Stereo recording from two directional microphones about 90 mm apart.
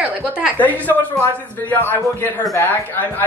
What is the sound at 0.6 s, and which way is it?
Speech, 20° left (ahead or behind).